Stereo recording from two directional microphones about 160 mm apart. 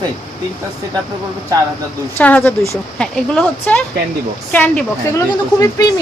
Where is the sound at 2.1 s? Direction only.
10° left (ahead or behind).